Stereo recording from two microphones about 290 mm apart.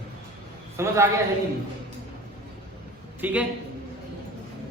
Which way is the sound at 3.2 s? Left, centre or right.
Centre.